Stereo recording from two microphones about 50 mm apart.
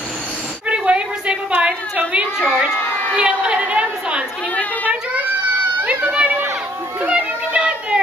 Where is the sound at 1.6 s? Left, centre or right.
Right.